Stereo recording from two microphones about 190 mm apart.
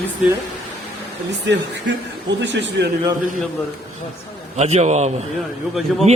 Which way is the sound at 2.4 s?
70° right (ahead or behind).